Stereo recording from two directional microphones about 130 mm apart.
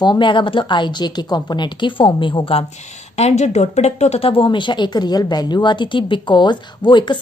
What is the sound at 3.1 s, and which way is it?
Speech, 60° left (ahead or behind).